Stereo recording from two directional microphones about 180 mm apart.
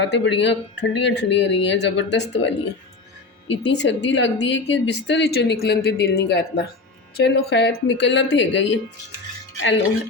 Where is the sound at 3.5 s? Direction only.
75° left (ahead or behind).